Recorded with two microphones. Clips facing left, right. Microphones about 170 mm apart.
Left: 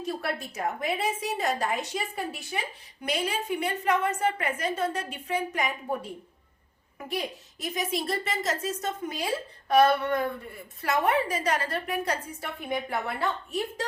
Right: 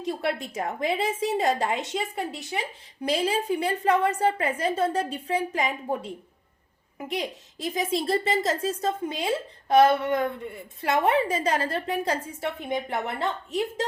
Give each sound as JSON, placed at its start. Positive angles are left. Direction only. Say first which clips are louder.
{"t": 0.0, "sound": "a woman's voice", "louder": "right 3 dB", "side_deg": -25}